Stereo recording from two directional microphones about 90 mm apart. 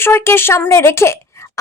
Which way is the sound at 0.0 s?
25° left (ahead or behind).